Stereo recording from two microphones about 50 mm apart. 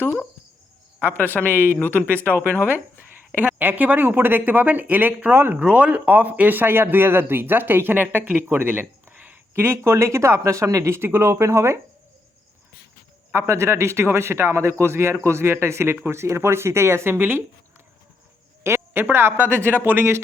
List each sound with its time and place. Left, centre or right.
1.1 s speech: left
3.3 s speech: right
5.5 s speech: right
8.4 s speech: right
9.1 s a sound: right
9.8 s speech: right
11.0 s speech: right
11.4 s speech: right
13.3 s a man's voice: right
17.2 s speech: right
18.6 s a sound: right
19.0 s speech: right